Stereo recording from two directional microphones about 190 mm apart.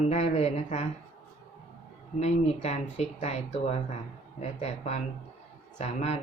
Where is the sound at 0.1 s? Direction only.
35° left (ahead or behind).